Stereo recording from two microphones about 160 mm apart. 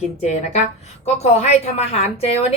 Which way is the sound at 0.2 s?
45° left (ahead or behind).